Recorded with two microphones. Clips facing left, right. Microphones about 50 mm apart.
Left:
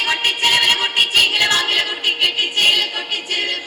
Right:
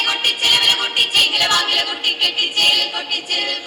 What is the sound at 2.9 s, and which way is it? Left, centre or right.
Music, left.